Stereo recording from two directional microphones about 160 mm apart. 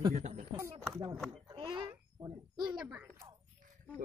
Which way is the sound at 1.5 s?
30° right (ahead or behind).